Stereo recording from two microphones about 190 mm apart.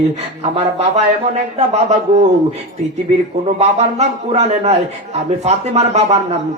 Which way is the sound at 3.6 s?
35° right (ahead or behind).